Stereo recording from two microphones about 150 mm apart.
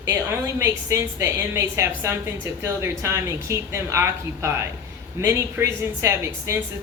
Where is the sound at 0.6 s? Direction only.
15° right (ahead or behind).